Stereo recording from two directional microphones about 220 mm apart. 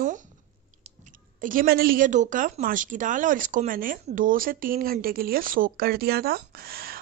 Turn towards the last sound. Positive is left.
turn(degrees=-45)  # may be behind; listen again after turning